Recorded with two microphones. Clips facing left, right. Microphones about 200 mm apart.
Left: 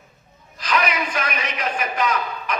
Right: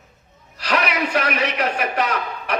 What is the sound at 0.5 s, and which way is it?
A man's voice, 70° right (ahead or behind).